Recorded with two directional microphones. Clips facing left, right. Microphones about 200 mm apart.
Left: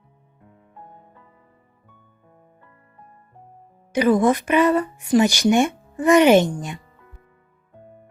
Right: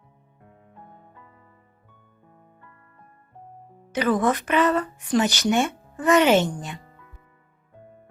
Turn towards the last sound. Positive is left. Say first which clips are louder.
# left 4 dB
turn(degrees=15)  # may be behind; listen again after turning